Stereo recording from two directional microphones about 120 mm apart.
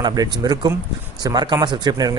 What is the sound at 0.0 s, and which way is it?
Speech, 30° right (ahead or behind).